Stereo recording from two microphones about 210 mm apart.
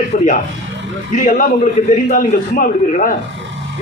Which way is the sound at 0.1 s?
40° left (ahead or behind).